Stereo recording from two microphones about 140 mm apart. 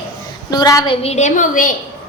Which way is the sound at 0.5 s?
25° left (ahead or behind).